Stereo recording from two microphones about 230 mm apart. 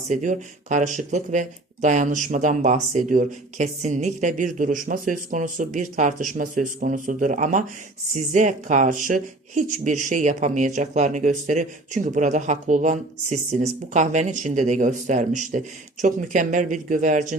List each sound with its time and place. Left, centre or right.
0.1 s speech: right